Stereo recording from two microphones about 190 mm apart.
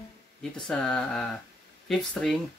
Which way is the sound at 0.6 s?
5° left (ahead or behind).